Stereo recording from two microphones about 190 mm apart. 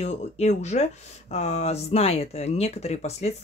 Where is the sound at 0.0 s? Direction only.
35° left (ahead or behind).